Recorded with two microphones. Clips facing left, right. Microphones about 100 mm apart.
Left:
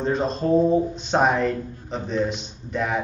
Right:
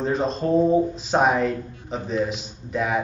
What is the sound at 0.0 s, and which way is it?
Speech, centre (ahead or behind).